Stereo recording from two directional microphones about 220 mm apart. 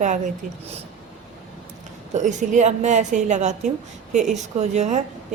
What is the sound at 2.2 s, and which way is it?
A woman's voice, 35° right (ahead or behind).